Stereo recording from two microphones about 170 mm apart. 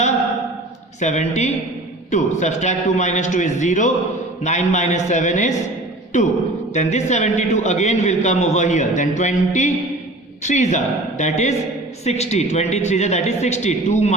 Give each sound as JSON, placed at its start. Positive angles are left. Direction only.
{"t": 0.9, "sound": "a man's voice", "side_deg": 45}